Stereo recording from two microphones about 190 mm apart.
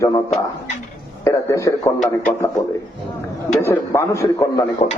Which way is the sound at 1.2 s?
15° left (ahead or behind).